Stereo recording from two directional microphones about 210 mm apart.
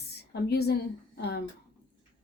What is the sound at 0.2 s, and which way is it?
A woman's voice, 50° left (ahead or behind).